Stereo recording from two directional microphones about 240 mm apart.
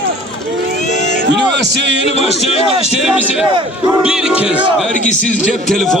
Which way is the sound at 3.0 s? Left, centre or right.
Centre.